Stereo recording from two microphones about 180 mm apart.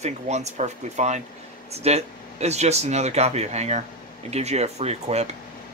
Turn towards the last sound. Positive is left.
turn(degrees=-35)  # may be behind; listen again after turning